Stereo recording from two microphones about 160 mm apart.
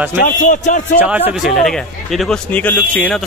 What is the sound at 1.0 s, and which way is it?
Speech, 10° right (ahead or behind).